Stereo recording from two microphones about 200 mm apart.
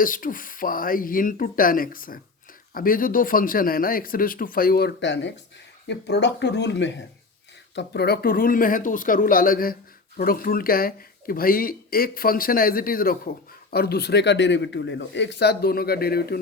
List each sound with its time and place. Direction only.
0.0 s speech: 45° left (ahead or behind)